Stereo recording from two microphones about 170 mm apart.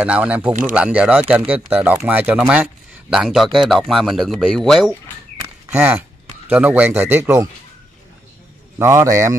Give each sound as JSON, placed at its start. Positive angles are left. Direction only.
{"t": 0.0, "sound": "speech", "side_deg": -10}
{"t": 5.7, "sound": "speech", "side_deg": -10}
{"t": 8.7, "sound": "speech", "side_deg": -15}